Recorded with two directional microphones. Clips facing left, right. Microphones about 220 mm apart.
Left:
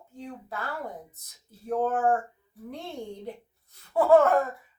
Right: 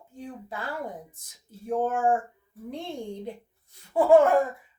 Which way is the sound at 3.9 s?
15° right (ahead or behind).